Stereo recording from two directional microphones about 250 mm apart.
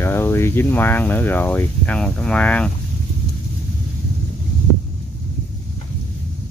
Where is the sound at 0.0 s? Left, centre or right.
Centre.